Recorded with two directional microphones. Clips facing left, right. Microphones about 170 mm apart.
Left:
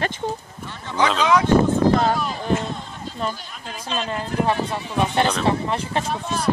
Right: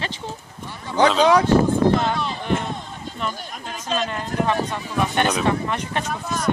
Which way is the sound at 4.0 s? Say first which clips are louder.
Left 2 dB; 30° left (ahead or behind).